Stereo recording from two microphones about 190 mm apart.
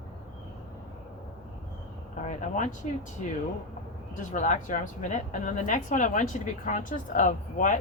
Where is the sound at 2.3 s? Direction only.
40° left (ahead or behind).